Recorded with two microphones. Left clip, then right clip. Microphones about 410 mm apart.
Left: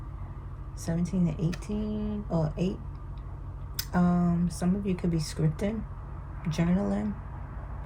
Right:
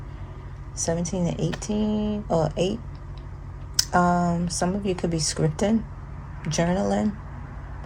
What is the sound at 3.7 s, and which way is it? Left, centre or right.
Speech, centre.